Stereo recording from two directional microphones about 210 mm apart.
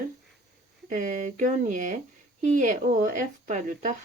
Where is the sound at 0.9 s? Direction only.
35° right (ahead or behind).